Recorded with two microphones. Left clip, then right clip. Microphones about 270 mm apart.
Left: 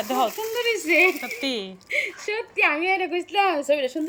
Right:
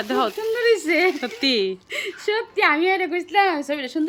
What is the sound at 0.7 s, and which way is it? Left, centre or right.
Speech, right.